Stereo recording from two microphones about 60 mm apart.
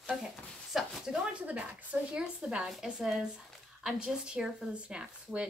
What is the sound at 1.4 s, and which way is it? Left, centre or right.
Speech, right.